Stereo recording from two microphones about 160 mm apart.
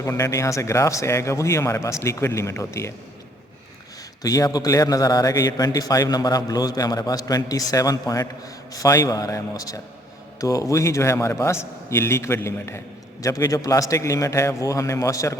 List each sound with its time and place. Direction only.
0.0 s speech: 20° left (ahead or behind)
4.2 s a man's voice: 25° left (ahead or behind)